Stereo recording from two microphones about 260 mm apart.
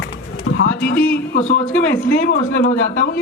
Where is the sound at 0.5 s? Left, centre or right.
Left.